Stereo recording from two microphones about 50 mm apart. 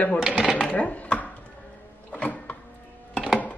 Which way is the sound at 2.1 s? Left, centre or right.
Left.